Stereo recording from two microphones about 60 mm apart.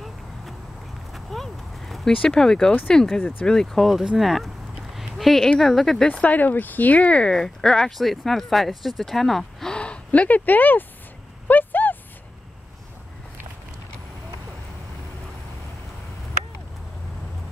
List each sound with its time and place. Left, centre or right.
1.1 s a sound: centre
2.9 s speech: centre
4.9 s clip-clop: centre
5.6 s speech: centre
6.2 s speech: left
7.3 s speech: centre
9.8 s speech: left
11.4 s a sound: left